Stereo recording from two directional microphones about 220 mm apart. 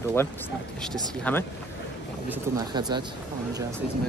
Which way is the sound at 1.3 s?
5° left (ahead or behind).